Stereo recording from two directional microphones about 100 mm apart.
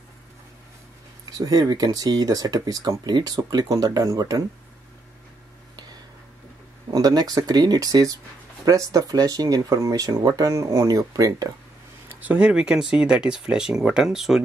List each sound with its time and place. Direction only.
1.3 s speech: 40° right (ahead or behind)
6.9 s speech: 40° right (ahead or behind)
12.1 s speech: 15° right (ahead or behind)